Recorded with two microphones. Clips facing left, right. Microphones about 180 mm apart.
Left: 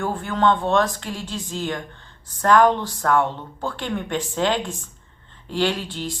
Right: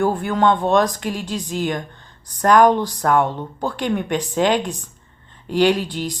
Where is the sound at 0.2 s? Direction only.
15° right (ahead or behind).